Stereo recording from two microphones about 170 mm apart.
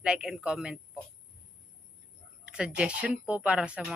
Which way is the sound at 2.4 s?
5° right (ahead or behind).